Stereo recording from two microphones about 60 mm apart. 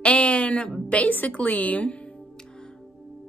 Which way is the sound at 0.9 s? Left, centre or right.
Left.